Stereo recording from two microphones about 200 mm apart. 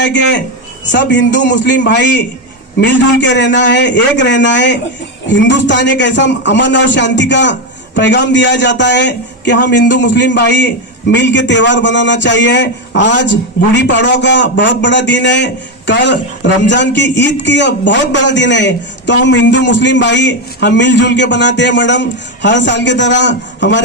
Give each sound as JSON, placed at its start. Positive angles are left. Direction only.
{"t": 0.0, "sound": "a man's voice", "side_deg": 60}